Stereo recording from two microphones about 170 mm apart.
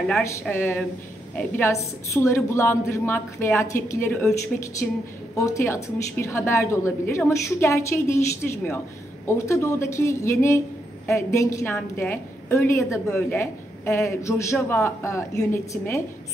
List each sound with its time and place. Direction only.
0.2 s a woman's voice: 15° left (ahead or behind)
5.4 s a woman's voice: 15° left (ahead or behind)